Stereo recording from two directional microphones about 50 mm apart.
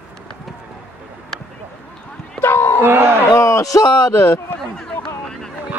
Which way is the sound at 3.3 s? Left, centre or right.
Left.